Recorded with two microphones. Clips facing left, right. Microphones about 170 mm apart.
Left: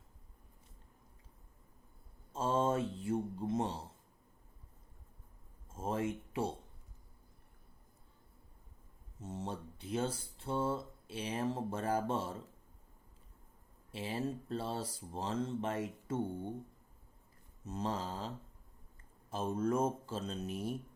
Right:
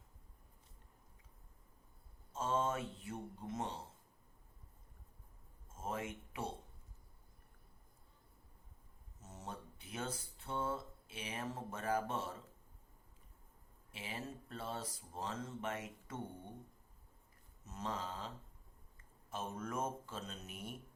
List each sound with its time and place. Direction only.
2.3 s mantra: 30° left (ahead or behind)
5.7 s a sound: 30° left (ahead or behind)
9.2 s a sound: 30° left (ahead or behind)
13.9 s speech: 35° left (ahead or behind)
17.7 s speech: 35° left (ahead or behind)
19.3 s speech: 30° left (ahead or behind)